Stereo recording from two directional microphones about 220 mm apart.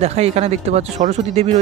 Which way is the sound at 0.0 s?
30° right (ahead or behind).